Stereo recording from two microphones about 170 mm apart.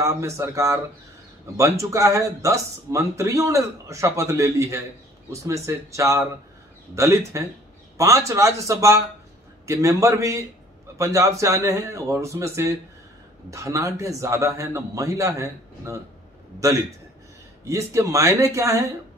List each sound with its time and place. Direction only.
0.0 s speech: 15° right (ahead or behind)